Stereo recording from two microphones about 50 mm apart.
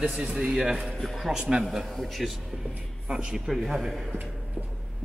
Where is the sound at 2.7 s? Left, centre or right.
Right.